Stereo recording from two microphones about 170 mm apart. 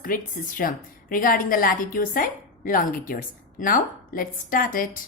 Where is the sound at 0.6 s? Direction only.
60° left (ahead or behind).